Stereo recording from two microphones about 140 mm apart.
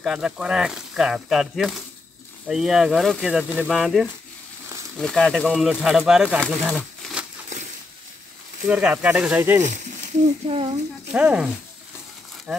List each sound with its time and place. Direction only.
0.0 s speech: 5° right (ahead or behind)
6.6 s crumpling: 5° right (ahead or behind)
8.6 s speech: 10° right (ahead or behind)
10.5 s speech: 35° right (ahead or behind)
11.1 s speech: 10° right (ahead or behind)